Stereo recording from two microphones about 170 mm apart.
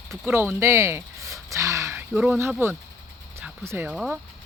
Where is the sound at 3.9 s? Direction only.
5° right (ahead or behind).